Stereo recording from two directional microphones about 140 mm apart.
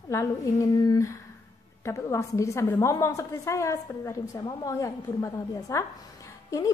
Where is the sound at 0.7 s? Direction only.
30° left (ahead or behind).